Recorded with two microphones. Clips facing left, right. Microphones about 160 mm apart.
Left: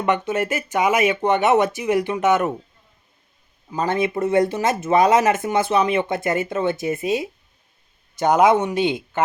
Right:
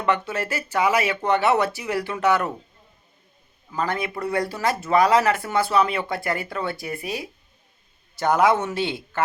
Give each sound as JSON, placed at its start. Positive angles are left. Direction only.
{"t": 0.0, "sound": "speech", "side_deg": 20}
{"t": 3.7, "sound": "speech", "side_deg": 20}